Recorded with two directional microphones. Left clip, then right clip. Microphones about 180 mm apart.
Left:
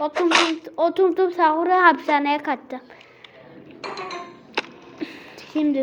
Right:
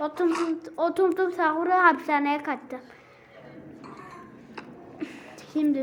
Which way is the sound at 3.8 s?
65° left (ahead or behind).